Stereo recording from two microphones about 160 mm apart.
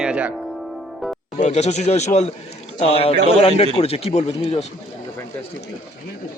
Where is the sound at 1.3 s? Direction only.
45° left (ahead or behind).